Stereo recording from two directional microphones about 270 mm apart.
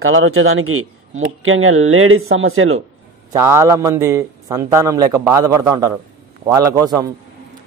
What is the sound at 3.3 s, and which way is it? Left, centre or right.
A man's voice, centre.